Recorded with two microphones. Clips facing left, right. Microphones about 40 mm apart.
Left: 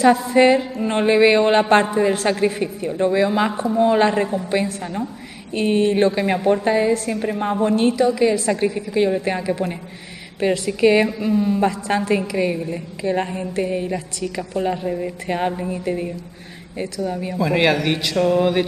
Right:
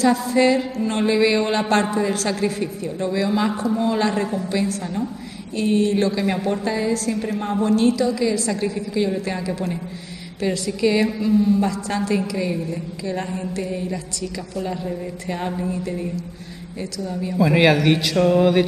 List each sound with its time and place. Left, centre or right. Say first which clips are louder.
0.0 s a woman's voice: left 3 dB; left
6.3 s a woman's voice: left 5 dB; centre
17.4 s a man's voice: right 2 dB; centre